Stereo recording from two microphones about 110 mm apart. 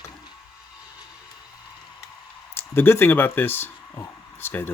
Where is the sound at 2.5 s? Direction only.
20° left (ahead or behind).